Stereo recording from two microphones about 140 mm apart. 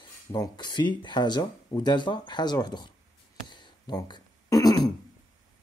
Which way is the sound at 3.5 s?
30° left (ahead or behind).